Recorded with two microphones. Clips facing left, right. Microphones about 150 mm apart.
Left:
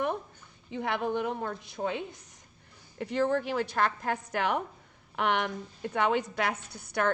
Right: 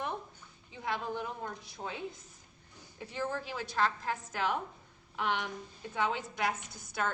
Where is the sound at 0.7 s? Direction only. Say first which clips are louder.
Left 6 dB; 65° left (ahead or behind).